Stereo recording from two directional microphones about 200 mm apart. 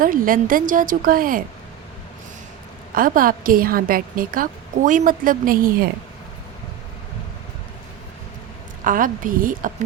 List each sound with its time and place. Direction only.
0.0 s a woman's voice: 45° right (ahead or behind)
2.9 s a woman's voice: 45° right (ahead or behind)
8.8 s a woman's voice: 40° right (ahead or behind)